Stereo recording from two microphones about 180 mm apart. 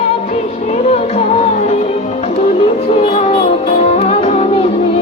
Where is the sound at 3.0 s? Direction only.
30° left (ahead or behind).